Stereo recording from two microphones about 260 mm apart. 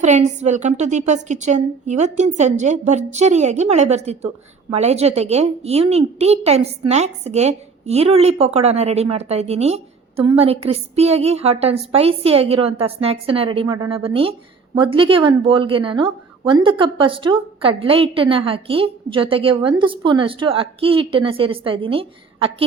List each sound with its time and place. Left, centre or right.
0.0 s a woman's voice: right